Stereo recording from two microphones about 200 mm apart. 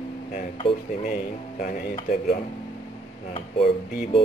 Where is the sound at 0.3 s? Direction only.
35° left (ahead or behind).